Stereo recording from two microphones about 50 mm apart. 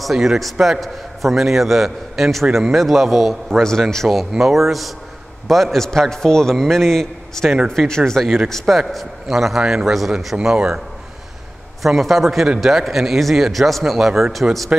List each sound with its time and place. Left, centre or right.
0.0 s a man's voice: centre
4.3 s a man's voice: centre
11.8 s a man's voice: centre